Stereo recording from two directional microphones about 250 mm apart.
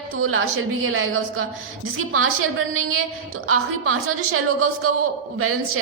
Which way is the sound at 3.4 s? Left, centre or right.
Right.